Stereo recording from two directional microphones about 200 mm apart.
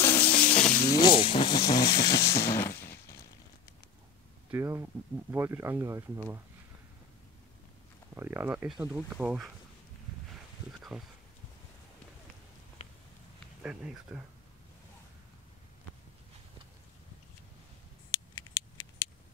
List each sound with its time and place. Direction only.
0.0 s music: 10° left (ahead or behind)
0.8 s a sound: 20° left (ahead or behind)
4.5 s speech: 15° right (ahead or behind)
8.1 s speech: 10° right (ahead or behind)
10.8 s speech: centre (ahead or behind)
13.6 s speech: 5° right (ahead or behind)
18.3 s a sound: 20° left (ahead or behind)